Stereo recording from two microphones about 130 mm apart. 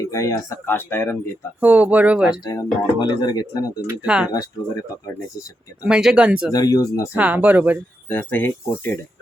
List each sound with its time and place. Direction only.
0.0 s speech: 25° left (ahead or behind)
1.6 s speech: 10° right (ahead or behind)
2.3 s speech: 30° left (ahead or behind)
4.0 s speech: 5° right (ahead or behind)
5.8 s speech: 5° right (ahead or behind)
6.5 s speech: 30° left (ahead or behind)
7.1 s speech: 10° right (ahead or behind)
8.1 s speech: 10° left (ahead or behind)